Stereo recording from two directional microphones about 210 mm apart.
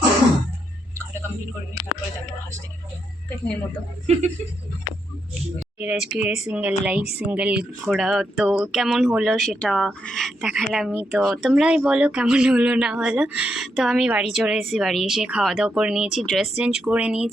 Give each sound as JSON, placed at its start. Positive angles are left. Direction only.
{"t": 4.0, "sound": "speech", "side_deg": -30}
{"t": 5.8, "sound": "speech", "side_deg": -5}